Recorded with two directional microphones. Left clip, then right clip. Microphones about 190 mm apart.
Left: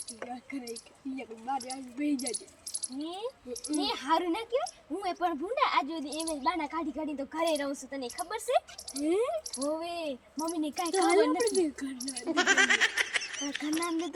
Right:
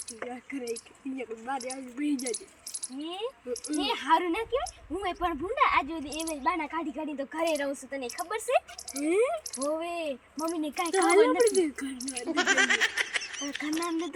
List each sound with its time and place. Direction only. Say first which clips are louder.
1.5 s speech: left 1 dB; 5° right (ahead or behind)
1.7 s speech: right 1 dB; 10° left (ahead or behind)
3.0 s speech: right 3 dB; 5° right (ahead or behind)